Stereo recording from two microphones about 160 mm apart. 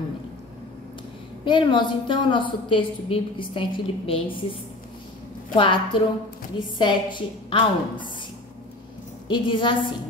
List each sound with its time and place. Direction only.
1.4 s a woman's voice: 30° left (ahead or behind)
9.3 s a woman's voice: 30° left (ahead or behind)